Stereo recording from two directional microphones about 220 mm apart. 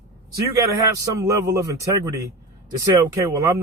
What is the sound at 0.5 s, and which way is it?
A man's voice, 15° right (ahead or behind).